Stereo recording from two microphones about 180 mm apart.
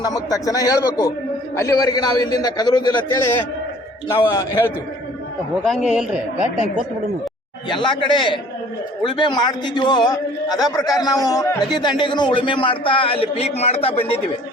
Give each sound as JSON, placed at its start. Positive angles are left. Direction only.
{"t": 0.0, "sound": "a man's voice", "side_deg": 20}
{"t": 5.6, "sound": "a man's voice", "side_deg": -5}
{"t": 7.7, "sound": "a man's voice", "side_deg": 25}